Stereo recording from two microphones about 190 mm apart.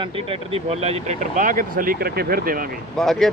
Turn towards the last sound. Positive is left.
turn(degrees=0)  # may be behind; listen again after turning